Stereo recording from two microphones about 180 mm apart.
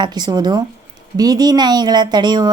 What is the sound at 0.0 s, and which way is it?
A woman's voice, 25° right (ahead or behind).